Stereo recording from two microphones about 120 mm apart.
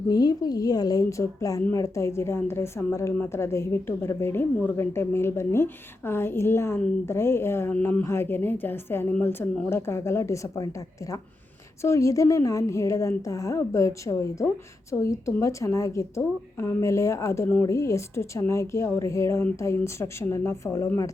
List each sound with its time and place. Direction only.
0.1 s a woman's voice: 35° left (ahead or behind)
11.8 s a woman's voice: 25° left (ahead or behind)